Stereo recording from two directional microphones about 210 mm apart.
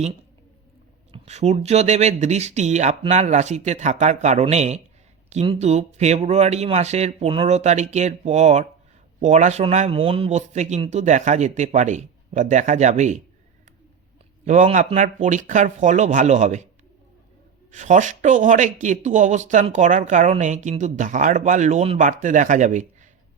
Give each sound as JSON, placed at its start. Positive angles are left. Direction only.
{"t": 1.1, "sound": "speech", "side_deg": -30}
{"t": 14.4, "sound": "speech", "side_deg": -35}
{"t": 17.7, "sound": "speech", "side_deg": -35}